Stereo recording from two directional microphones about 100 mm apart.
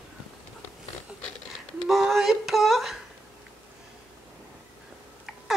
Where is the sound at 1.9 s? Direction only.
Centre (ahead or behind).